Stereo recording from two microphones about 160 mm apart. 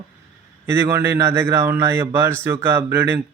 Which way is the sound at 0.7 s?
15° right (ahead or behind).